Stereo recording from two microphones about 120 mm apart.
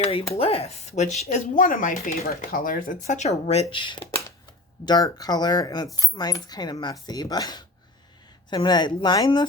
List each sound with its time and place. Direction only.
0.0 s speech: 50° left (ahead or behind); by 9.4 s 35° left (ahead or behind)